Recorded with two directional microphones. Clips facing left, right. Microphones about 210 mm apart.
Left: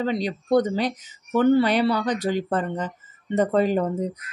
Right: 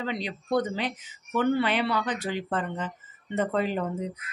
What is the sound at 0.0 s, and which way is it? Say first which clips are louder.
Speech: left 7 dB; 40° left (ahead or behind).